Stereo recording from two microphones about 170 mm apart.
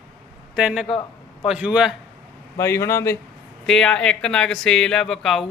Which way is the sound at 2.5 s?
15° left (ahead or behind).